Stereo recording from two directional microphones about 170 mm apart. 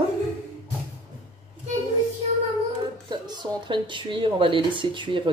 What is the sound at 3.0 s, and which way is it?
Speech, 25° right (ahead or behind).